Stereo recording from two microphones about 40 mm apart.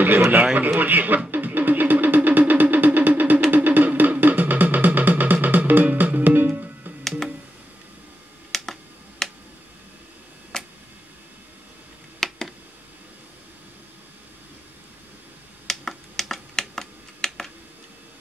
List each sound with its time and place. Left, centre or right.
0.0 s a man's voice: right
1.3 s music: right
8.5 s computer keyboard: centre
9.2 s finger snapping: centre
10.5 s tick: centre
12.2 s a sound: centre
15.6 s computer keyboard: centre